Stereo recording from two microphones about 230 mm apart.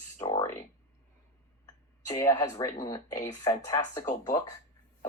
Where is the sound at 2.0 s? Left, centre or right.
Centre.